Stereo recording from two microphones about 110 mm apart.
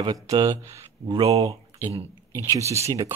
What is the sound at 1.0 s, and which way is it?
Speech, 50° right (ahead or behind).